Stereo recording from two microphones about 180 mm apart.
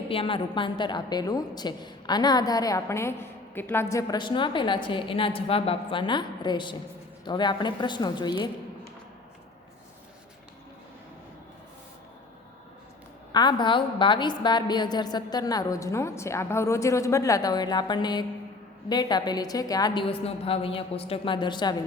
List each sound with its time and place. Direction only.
0.1 s a woman's voice: 30° left (ahead or behind)
13.3 s a woman's voice: 25° left (ahead or behind)